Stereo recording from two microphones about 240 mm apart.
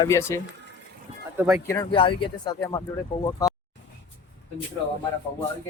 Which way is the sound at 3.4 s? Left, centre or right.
Centre.